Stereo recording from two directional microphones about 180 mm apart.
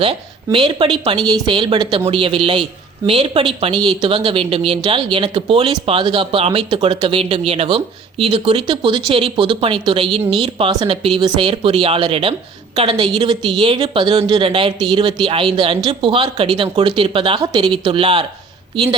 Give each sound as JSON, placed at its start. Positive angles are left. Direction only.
{"t": 0.0, "sound": "a woman's voice", "side_deg": -30}